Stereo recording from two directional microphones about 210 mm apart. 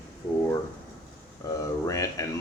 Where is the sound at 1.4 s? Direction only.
15° left (ahead or behind).